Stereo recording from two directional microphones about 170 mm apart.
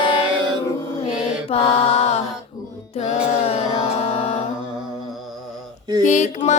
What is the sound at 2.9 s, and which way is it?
Music, 35° left (ahead or behind).